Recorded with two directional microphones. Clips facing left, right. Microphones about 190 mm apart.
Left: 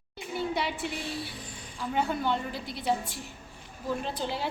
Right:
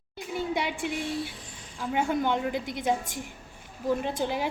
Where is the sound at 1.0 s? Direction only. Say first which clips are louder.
Right 4 dB; centre (ahead or behind).